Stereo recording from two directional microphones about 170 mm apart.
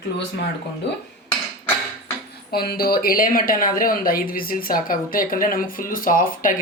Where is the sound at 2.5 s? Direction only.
65° left (ahead or behind).